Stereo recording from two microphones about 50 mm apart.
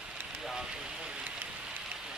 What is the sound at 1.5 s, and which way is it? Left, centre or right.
Rain on surface, right.